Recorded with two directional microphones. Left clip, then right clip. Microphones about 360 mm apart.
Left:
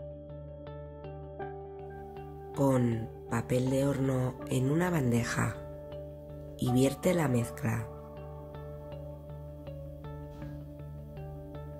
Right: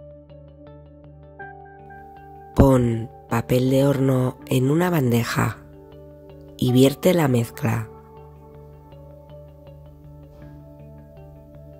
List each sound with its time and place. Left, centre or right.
2.5 s speech: right
6.6 s speech: right